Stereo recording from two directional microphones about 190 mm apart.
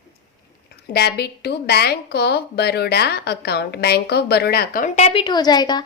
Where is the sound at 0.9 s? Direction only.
60° left (ahead or behind); by 5.8 s 20° left (ahead or behind).